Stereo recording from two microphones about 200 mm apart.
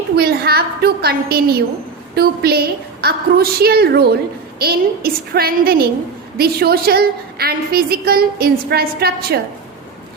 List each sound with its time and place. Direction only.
0.2 s a woman's voice: 50° right (ahead or behind)